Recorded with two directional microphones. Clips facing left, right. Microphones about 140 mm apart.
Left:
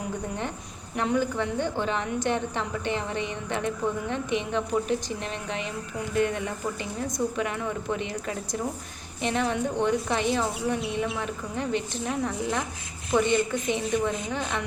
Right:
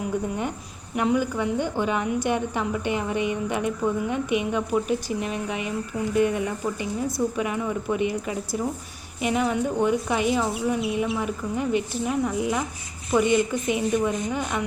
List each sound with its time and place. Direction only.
0.9 s speech: 10° right (ahead or behind)